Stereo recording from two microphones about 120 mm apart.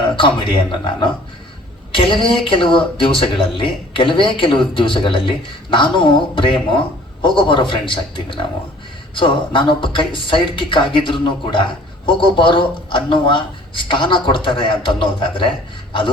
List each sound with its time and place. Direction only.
0.2 s speech: 45° left (ahead or behind)